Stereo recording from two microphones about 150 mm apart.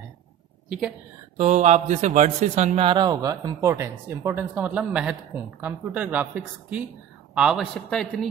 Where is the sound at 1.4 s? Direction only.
50° right (ahead or behind).